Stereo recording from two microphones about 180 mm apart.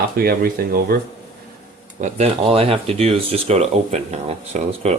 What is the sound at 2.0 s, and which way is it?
Speech, 40° right (ahead or behind).